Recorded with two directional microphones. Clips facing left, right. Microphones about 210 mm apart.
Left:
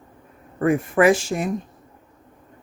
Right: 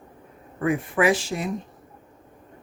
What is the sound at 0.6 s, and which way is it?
Speech, 45° left (ahead or behind).